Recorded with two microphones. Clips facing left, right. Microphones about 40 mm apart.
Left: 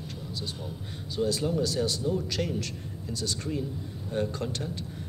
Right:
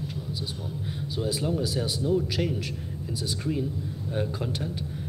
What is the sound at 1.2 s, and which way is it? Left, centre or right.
Speech, centre.